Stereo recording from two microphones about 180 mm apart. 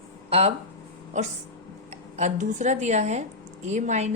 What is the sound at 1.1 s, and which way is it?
A woman's voice, 40° right (ahead or behind).